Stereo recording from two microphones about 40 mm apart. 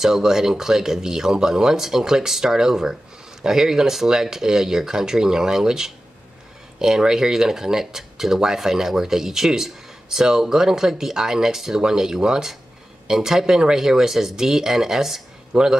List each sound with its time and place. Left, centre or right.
0.0 s speech: centre
15.5 s a man's voice: right